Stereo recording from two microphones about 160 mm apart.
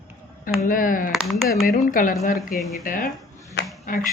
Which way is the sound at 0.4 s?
60° left (ahead or behind).